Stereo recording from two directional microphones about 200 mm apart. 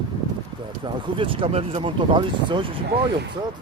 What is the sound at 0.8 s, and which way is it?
Speech, 25° right (ahead or behind).